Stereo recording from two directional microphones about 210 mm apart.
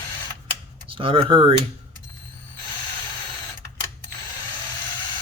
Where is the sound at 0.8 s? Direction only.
25° right (ahead or behind).